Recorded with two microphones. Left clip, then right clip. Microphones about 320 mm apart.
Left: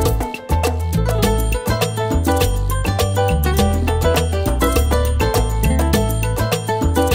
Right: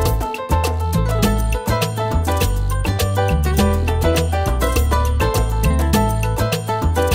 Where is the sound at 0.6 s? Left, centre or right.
Left.